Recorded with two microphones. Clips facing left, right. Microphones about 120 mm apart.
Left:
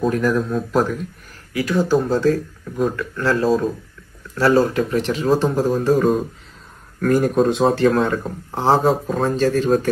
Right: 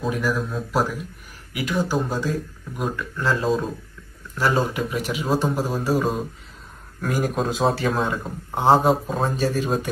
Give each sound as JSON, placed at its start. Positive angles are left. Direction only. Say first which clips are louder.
{"t": 0.0, "sound": "speech", "louder": "left 6 dB", "side_deg": -5}
{"t": 1.5, "sound": "speech", "louder": "left 6 dB", "side_deg": -20}